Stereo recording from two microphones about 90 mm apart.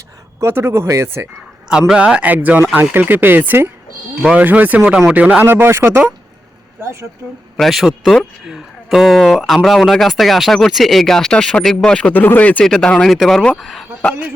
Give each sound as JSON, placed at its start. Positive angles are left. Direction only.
{"t": 0.3, "sound": "speech", "side_deg": -30}
{"t": 1.9, "sound": "speech", "side_deg": -10}
{"t": 4.2, "sound": "speech", "side_deg": -10}
{"t": 4.4, "sound": "speech", "side_deg": -20}
{"t": 7.5, "sound": "speech", "side_deg": 0}
{"t": 12.1, "sound": "speech", "side_deg": 20}